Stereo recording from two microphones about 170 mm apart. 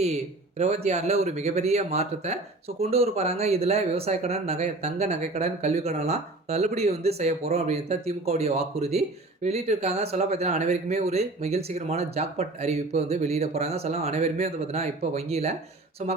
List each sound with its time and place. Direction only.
0.0 s speech: 40° right (ahead or behind)